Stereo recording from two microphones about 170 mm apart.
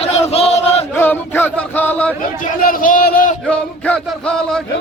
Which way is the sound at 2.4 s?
55° left (ahead or behind).